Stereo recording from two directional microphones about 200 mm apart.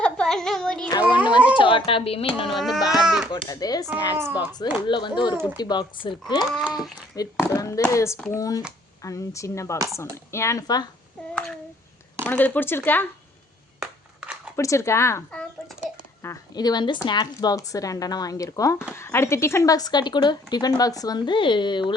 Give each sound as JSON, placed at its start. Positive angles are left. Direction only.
{"t": 0.0, "sound": "child singing", "side_deg": 5}
{"t": 1.1, "sound": "a sound", "side_deg": 25}
{"t": 1.5, "sound": "speech", "side_deg": 25}
{"t": 2.6, "sound": "speech", "side_deg": 0}
{"t": 3.3, "sound": "speech", "side_deg": 20}
{"t": 4.2, "sound": "speech", "side_deg": -10}
{"t": 4.9, "sound": "speech", "side_deg": 25}
{"t": 6.5, "sound": "speech", "side_deg": 0}
{"t": 7.2, "sound": "speech", "side_deg": 15}
{"t": 12.2, "sound": "speech", "side_deg": 10}
{"t": 13.7, "sound": "a sound", "side_deg": -5}
{"t": 14.5, "sound": "speech", "side_deg": 15}